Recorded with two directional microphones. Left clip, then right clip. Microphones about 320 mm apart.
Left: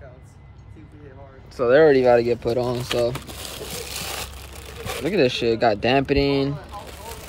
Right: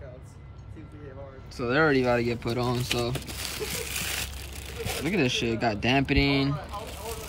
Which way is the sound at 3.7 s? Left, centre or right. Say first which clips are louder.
Left 1 dB; centre.